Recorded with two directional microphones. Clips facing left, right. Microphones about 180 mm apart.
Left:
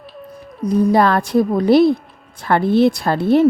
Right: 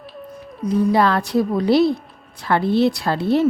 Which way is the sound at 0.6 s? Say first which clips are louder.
Left 3 dB; 40° left (ahead or behind).